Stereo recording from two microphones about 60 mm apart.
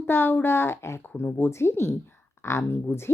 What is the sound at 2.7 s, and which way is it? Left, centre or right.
Speech, left.